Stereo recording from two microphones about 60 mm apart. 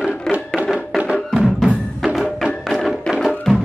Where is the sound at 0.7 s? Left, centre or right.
Centre.